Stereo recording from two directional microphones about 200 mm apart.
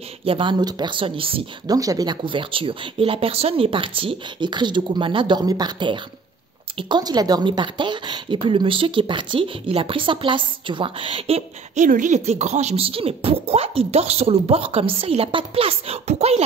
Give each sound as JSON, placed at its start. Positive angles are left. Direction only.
{"t": 0.2, "sound": "speech", "side_deg": -25}